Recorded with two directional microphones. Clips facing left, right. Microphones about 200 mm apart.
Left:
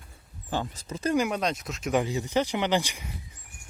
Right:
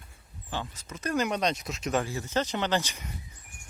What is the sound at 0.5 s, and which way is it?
Speech, 40° left (ahead or behind).